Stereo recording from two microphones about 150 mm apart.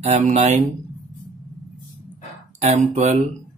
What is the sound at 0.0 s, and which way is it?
Speech, 55° right (ahead or behind).